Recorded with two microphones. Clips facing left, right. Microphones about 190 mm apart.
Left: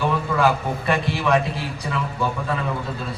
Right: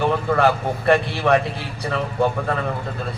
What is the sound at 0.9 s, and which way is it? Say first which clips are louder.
Speech: right 4 dB; 55° right (ahead or behind).